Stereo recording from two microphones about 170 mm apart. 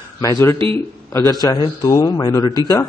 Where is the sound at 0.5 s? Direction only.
30° right (ahead or behind).